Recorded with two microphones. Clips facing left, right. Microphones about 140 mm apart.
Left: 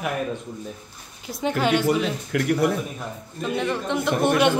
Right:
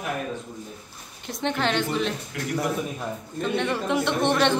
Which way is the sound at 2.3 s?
70° left (ahead or behind).